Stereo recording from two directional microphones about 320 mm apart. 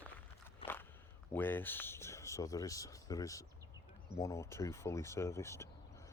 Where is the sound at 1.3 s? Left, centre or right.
Centre.